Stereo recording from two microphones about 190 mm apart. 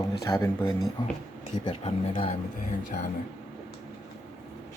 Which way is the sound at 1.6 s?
25° left (ahead or behind).